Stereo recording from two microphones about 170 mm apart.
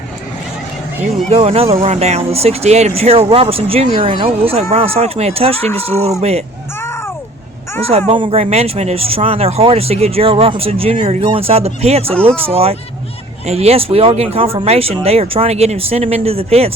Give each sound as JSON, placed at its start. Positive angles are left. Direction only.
{"t": 1.3, "sound": "speech", "side_deg": -35}
{"t": 5.6, "sound": "speech", "side_deg": 15}
{"t": 7.8, "sound": "speech", "side_deg": -35}